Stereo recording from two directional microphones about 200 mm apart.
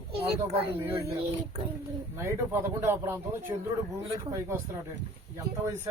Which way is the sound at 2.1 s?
10° right (ahead or behind).